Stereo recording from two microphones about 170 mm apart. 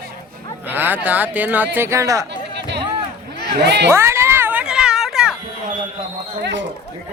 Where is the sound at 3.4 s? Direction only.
80° right.